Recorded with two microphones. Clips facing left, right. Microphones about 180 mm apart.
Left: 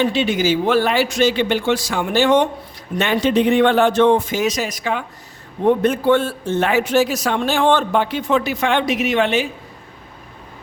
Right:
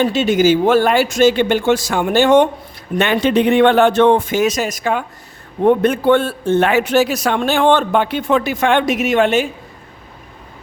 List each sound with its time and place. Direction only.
0.0 s speech: 45° right (ahead or behind)
3.0 s speech: 60° right (ahead or behind)
5.6 s speech: 60° right (ahead or behind)